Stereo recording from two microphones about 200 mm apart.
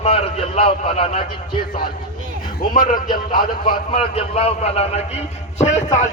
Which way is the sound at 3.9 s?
30° left (ahead or behind).